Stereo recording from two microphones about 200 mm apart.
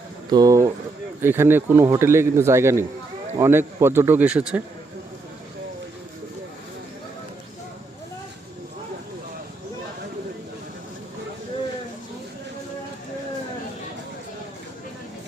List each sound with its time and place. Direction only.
0.3 s a man's voice: 20° right (ahead or behind)